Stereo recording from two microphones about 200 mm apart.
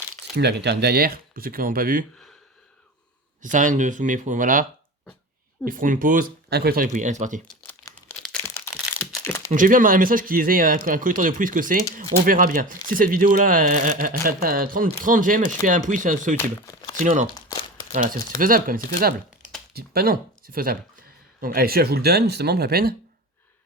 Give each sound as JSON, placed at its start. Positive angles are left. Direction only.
{"t": 0.3, "sound": "speech", "side_deg": -55}
{"t": 3.4, "sound": "speech", "side_deg": -40}
{"t": 5.6, "sound": "speech", "side_deg": -40}
{"t": 7.4, "sound": "crumpling", "side_deg": 10}
{"t": 9.2, "sound": "a sound", "side_deg": 15}
{"t": 9.5, "sound": "speech", "side_deg": -40}
{"t": 16.4, "sound": "speech", "side_deg": 20}
{"t": 16.9, "sound": "speech", "side_deg": -40}